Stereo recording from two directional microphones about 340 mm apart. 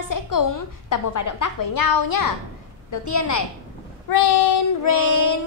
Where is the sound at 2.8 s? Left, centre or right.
Left.